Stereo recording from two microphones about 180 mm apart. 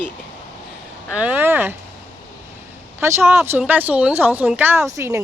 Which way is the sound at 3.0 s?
15° right (ahead or behind).